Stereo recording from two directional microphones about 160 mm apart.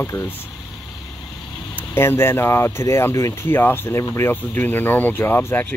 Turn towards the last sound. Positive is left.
turn(degrees=15)  # may be behind; listen again after turning